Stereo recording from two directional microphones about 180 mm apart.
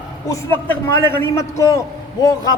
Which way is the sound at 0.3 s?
10° left (ahead or behind).